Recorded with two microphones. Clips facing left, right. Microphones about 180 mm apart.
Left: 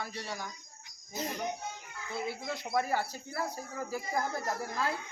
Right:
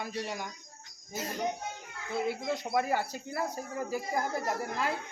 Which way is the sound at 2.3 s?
20° right (ahead or behind).